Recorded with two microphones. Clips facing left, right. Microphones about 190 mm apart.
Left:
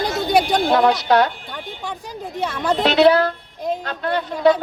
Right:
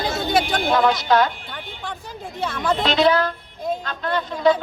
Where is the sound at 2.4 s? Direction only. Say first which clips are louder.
Left 1 dB; 10° left (ahead or behind).